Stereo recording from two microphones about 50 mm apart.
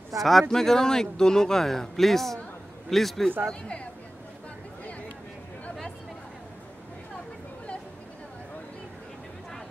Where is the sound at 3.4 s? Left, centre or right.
Centre.